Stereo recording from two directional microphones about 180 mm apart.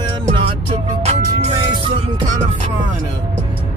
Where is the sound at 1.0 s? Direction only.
35° right (ahead or behind).